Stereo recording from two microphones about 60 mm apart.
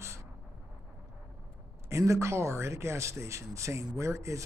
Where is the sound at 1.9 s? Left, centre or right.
Right.